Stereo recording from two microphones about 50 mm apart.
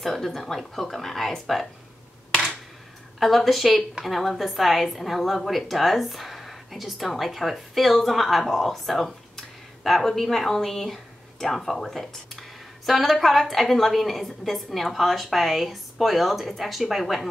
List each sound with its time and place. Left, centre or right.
0.0 s speech: centre
3.2 s speech: centre